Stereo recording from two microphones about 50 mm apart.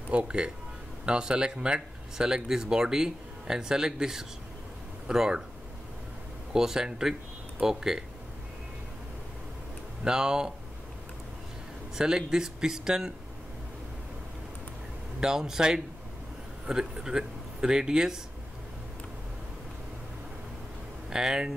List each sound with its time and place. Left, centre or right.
0.1 s speech: right
6.5 s speech: centre
10.0 s speech: centre
11.9 s speech: centre
15.1 s speech: centre
21.1 s speech: centre